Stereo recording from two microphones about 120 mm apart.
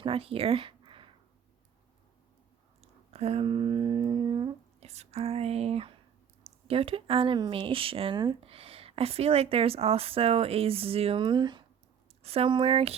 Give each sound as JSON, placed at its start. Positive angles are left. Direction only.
{"t": 0.0, "sound": "a sound", "side_deg": -50}
{"t": 2.8, "sound": "humming", "side_deg": -60}
{"t": 4.8, "sound": "a woman's voice", "side_deg": -60}
{"t": 12.2, "sound": "speech", "side_deg": -55}